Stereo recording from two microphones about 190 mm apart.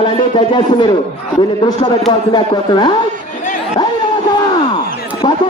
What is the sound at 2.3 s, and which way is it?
Speech, 25° left (ahead or behind).